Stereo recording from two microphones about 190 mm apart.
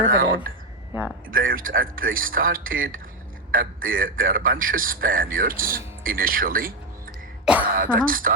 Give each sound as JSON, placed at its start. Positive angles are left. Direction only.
{"t": 0.0, "sound": "a man's voice", "side_deg": -45}
{"t": 1.3, "sound": "a man's voice", "side_deg": -50}
{"t": 7.4, "sound": "speech", "side_deg": -5}
{"t": 7.9, "sound": "a man's voice", "side_deg": -45}